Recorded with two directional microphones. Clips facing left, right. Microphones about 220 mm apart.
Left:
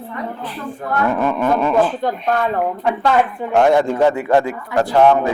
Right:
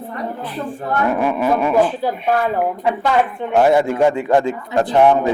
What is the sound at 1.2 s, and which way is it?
A man's voice, 10° right (ahead or behind).